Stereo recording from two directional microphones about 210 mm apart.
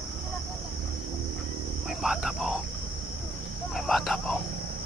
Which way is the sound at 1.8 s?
Centre (ahead or behind).